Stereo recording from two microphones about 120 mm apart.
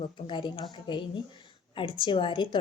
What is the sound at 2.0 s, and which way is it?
Speech, 45° left (ahead or behind).